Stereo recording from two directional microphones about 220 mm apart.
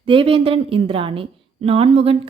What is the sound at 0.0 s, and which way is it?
A woman's voice, 25° right (ahead or behind).